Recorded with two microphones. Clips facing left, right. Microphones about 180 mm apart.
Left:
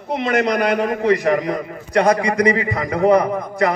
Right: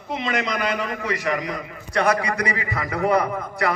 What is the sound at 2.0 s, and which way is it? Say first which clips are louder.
A man's voice: left 6 dB; 30° left (ahead or behind).